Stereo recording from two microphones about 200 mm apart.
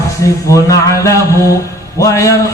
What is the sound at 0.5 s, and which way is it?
Music, 15° left (ahead or behind).